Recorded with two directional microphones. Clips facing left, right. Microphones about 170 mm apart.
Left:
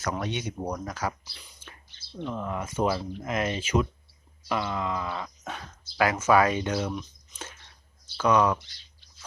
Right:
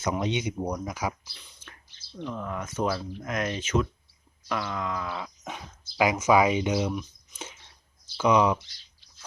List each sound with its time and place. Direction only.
0.0 s speech: 20° right (ahead or behind)
2.2 s speech: centre (ahead or behind)
3.2 s groan: 5° left (ahead or behind)
5.4 s speech: 15° right (ahead or behind)